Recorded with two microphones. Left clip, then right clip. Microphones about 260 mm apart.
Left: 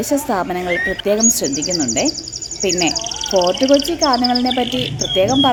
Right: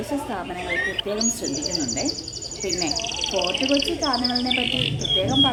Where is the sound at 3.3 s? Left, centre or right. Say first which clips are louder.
Left 10 dB; left.